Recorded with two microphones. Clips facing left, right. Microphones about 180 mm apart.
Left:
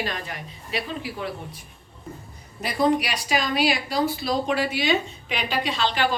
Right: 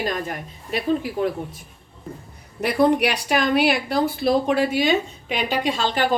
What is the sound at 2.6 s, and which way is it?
A woman's voice, 60° right (ahead or behind).